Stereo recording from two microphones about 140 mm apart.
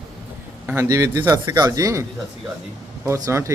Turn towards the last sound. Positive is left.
turn(degrees=-20)  # may be behind; listen again after turning